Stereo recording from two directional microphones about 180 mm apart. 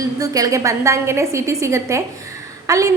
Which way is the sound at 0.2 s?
20° right (ahead or behind).